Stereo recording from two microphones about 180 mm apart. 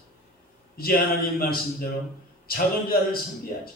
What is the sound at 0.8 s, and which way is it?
Speech, 55° left (ahead or behind).